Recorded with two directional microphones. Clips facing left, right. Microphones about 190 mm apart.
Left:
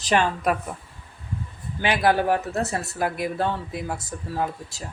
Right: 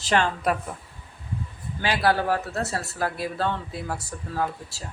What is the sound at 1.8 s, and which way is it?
Speech, 20° left (ahead or behind).